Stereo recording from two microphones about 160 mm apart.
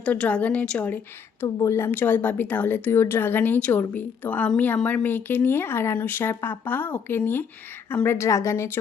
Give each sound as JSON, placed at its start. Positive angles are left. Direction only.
{"t": 0.0, "sound": "speech", "side_deg": 10}